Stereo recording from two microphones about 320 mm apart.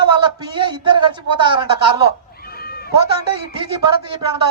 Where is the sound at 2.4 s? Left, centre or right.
Left.